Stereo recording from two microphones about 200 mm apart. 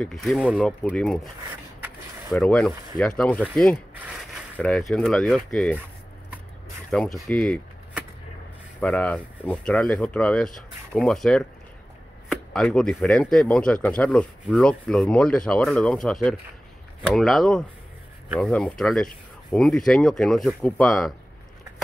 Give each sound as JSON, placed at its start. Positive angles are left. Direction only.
{"t": 0.0, "sound": "speech", "side_deg": 0}
{"t": 2.3, "sound": "speech", "side_deg": 5}
{"t": 6.9, "sound": "speech", "side_deg": 5}
{"t": 8.7, "sound": "speech", "side_deg": 5}